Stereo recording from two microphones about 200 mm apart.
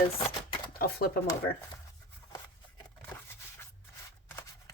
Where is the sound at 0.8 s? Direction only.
50° left (ahead or behind).